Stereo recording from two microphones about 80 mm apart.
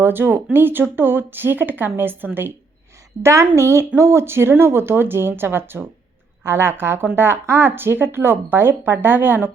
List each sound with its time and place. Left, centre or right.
0.0 s speech: right